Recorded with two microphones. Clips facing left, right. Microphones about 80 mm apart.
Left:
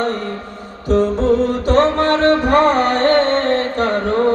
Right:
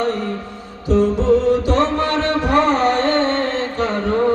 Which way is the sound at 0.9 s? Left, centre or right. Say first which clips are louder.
Even; left.